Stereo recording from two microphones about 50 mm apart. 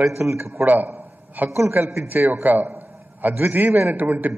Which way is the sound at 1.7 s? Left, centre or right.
Right.